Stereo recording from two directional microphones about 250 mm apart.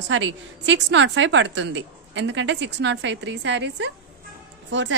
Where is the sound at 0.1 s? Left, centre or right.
Right.